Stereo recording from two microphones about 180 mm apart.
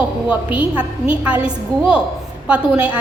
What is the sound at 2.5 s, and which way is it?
Speech, 10° right (ahead or behind).